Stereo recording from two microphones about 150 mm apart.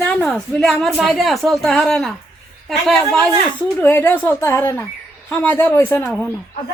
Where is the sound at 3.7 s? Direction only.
15° left (ahead or behind).